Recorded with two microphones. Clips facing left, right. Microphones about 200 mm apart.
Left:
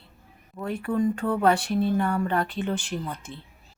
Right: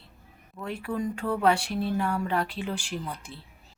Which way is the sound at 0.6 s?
5° left (ahead or behind).